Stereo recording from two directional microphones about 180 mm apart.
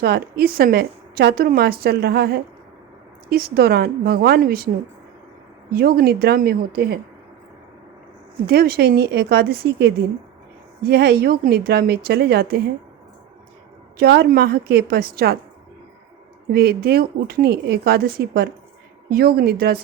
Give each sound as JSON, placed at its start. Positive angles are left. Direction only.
{"t": 0.0, "sound": "a woman's voice", "side_deg": -60}
{"t": 5.7, "sound": "a woman's voice", "side_deg": -60}
{"t": 8.4, "sound": "a woman's voice", "side_deg": -60}
{"t": 14.0, "sound": "a woman's voice", "side_deg": -60}
{"t": 16.5, "sound": "a woman's voice", "side_deg": -60}